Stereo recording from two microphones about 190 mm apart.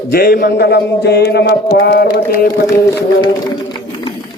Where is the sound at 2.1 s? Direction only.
50° left (ahead or behind).